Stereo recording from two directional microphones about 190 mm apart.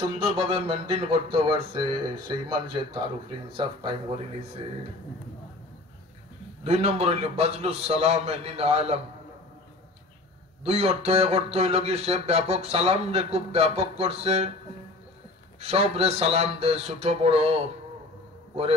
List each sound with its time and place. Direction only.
0.2 s speech: 30° right (ahead or behind)
6.6 s speech: 35° right (ahead or behind)
10.6 s speech: 30° right (ahead or behind)
15.6 s speech: 30° right (ahead or behind)